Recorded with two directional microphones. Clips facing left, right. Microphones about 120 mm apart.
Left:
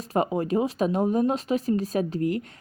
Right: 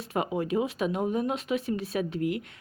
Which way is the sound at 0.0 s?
35° left (ahead or behind).